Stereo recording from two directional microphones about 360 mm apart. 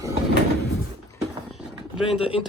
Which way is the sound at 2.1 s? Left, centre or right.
Centre.